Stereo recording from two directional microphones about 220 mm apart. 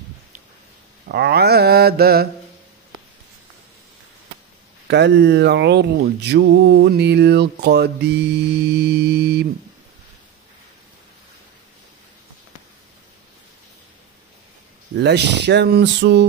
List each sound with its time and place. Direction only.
1.0 s mantra: 45° right (ahead or behind)
4.8 s mantra: 50° right (ahead or behind)
15.0 s mantra: 50° right (ahead or behind)